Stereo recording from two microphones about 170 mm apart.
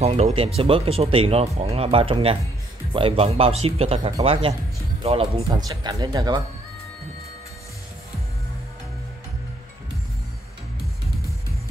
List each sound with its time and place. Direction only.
0.0 s speech: 35° right (ahead or behind)
5.6 s speech: 25° right (ahead or behind)